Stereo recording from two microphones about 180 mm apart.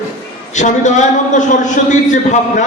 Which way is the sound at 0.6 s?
40° left (ahead or behind).